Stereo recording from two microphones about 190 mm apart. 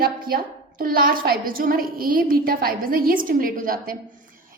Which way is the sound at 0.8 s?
50° right (ahead or behind).